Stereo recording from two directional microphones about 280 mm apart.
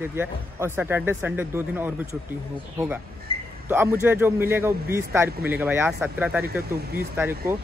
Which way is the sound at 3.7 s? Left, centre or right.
Centre.